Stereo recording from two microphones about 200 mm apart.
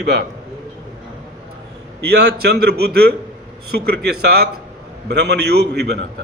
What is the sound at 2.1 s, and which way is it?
A man's voice, 55° right (ahead or behind).